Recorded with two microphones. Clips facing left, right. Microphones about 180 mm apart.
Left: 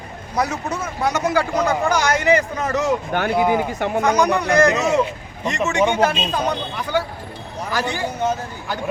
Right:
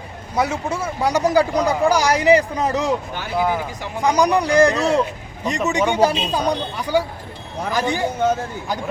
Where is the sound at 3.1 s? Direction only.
55° left (ahead or behind).